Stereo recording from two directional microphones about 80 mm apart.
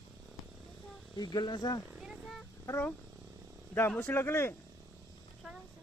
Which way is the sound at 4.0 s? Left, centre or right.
Left.